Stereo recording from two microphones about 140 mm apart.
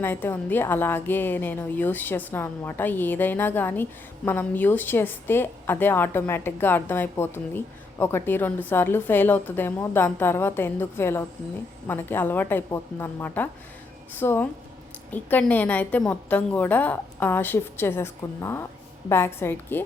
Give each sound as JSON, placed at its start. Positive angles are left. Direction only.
{"t": 0.0, "sound": "a woman's voice", "side_deg": 15}